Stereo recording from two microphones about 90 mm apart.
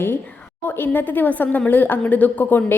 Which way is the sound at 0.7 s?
20° left (ahead or behind).